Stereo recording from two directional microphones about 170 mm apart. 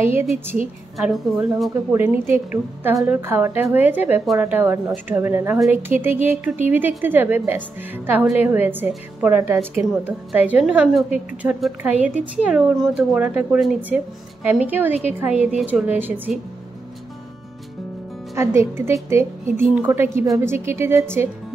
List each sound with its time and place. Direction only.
0.0 s a woman's voice: 15° right (ahead or behind)
0.9 s a woman's voice: centre (ahead or behind)
1.9 s a woman's voice: 15° right (ahead or behind)
18.3 s a woman's voice: 15° right (ahead or behind)